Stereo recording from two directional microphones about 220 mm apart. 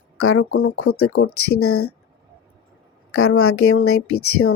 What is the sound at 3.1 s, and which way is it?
Speech, 75° left (ahead or behind).